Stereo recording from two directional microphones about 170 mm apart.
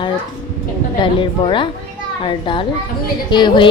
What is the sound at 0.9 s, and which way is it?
A woman's voice, 30° left (ahead or behind).